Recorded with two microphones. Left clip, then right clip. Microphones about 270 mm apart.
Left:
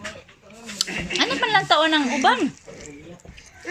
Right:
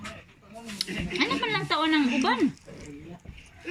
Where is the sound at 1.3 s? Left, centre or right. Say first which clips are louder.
Left 8 dB; left.